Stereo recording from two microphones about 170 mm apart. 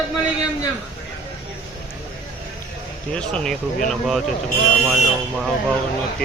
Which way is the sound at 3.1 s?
5° left (ahead or behind).